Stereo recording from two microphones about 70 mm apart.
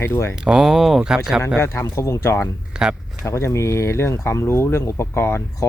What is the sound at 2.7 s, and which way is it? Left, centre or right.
Speech, centre.